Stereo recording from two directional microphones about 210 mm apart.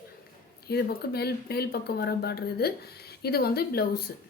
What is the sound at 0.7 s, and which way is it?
Speech, 50° left (ahead or behind).